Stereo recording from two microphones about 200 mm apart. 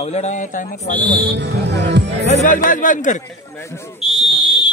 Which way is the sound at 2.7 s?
40° left (ahead or behind).